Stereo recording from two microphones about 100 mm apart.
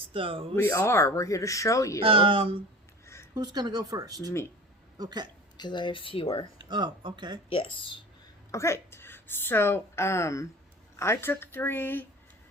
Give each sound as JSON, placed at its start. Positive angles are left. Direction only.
{"t": 0.1, "sound": "speech", "side_deg": -65}
{"t": 0.5, "sound": "speech", "side_deg": 25}
{"t": 2.0, "sound": "speech", "side_deg": -60}
{"t": 3.3, "sound": "speech", "side_deg": -45}
{"t": 5.5, "sound": "speech", "side_deg": 50}
{"t": 6.6, "sound": "speech", "side_deg": -50}
{"t": 7.5, "sound": "speech", "side_deg": 65}
{"t": 8.5, "sound": "a woman's voice", "side_deg": 30}